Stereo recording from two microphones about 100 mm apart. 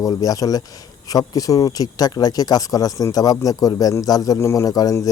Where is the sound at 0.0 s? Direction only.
40° left (ahead or behind).